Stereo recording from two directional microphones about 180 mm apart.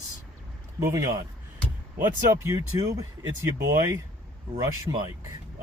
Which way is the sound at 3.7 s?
15° right (ahead or behind).